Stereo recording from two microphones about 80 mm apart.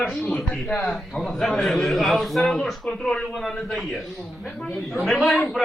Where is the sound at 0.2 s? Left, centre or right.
Centre.